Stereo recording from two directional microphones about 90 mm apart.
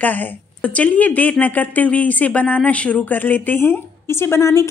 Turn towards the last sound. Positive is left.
turn(degrees=30)  # may be behind; listen again after turning